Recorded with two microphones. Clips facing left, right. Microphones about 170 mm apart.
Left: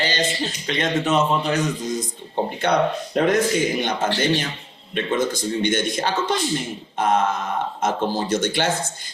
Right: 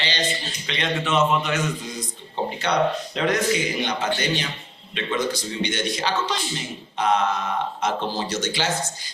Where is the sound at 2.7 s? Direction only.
55° left (ahead or behind).